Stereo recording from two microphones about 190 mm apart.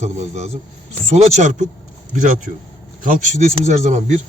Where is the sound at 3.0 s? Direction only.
45° right (ahead or behind).